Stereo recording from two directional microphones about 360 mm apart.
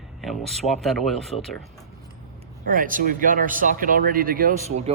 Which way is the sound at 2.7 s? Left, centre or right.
Right.